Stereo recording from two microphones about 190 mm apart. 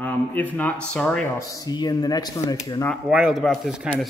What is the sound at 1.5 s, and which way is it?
Speech, 20° left (ahead or behind).